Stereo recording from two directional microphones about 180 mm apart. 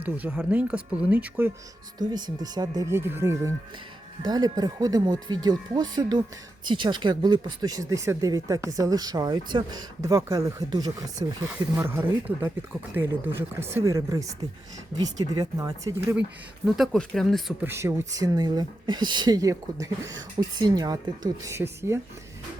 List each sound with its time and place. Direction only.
0.0 s speech: 10° right (ahead or behind)
2.0 s speech: 25° right (ahead or behind)
11.4 s speech: 10° right (ahead or behind)
16.6 s speech: centre (ahead or behind)
17.6 s speech: 15° right (ahead or behind)